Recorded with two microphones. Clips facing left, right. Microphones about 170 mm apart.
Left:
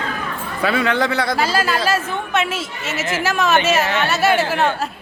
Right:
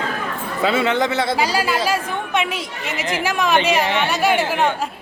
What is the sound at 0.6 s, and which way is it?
Speech, 20° right (ahead or behind).